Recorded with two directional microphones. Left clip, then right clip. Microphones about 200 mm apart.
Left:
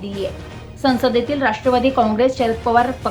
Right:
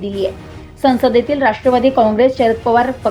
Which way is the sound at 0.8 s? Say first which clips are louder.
Right 4 dB; 10° right (ahead or behind).